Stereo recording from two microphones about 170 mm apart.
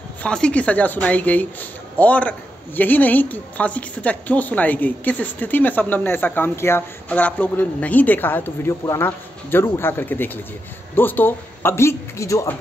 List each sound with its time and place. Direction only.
0.2 s speech: 5° left (ahead or behind)